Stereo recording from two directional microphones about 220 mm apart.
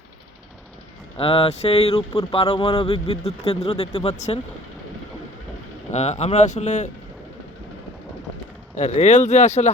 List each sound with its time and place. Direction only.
1.1 s speech: 25° left (ahead or behind)
5.9 s speech: 30° left (ahead or behind)
8.7 s speech: 30° left (ahead or behind)